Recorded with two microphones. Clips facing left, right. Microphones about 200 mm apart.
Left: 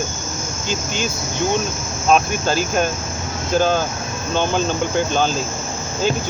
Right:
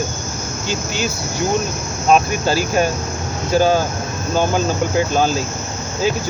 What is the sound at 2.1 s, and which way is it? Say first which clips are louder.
Speech: right 2 dB; 5° right (ahead or behind).